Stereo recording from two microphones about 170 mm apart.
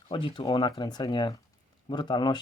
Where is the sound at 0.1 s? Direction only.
30° left (ahead or behind).